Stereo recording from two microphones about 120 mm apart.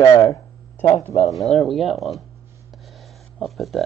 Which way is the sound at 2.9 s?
Centre (ahead or behind).